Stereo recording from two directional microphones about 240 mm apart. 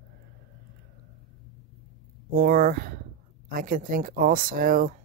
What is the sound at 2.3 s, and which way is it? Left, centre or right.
Speech, right.